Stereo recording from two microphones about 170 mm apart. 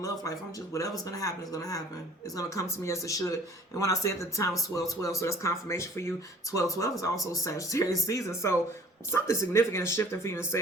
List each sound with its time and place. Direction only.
0.0 s speech: 20° left (ahead or behind)